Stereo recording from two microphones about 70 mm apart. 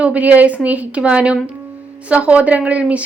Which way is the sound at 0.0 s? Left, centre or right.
Right.